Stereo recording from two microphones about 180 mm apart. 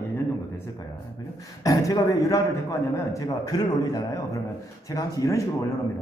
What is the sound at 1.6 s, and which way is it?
A man's voice, 20° left (ahead or behind).